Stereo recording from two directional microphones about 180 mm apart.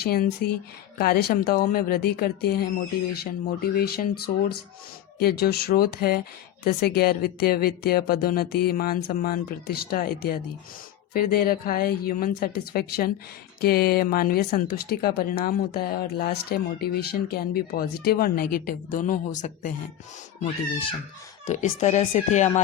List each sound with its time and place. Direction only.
0.0 s speech: 60° left (ahead or behind)
20.4 s speech: 30° left (ahead or behind)
21.4 s speech: 40° left (ahead or behind)